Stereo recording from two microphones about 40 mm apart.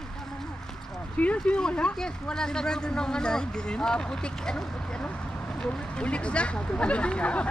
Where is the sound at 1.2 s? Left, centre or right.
Left.